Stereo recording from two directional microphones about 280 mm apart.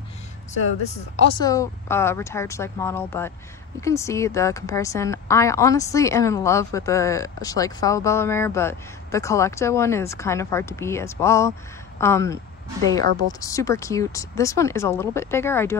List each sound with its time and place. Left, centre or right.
1.4 s a woman's voice: centre
13.4 s a woman's voice: centre